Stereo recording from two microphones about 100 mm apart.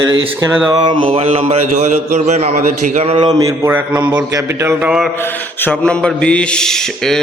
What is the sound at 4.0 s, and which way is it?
Speech, 45° right (ahead or behind).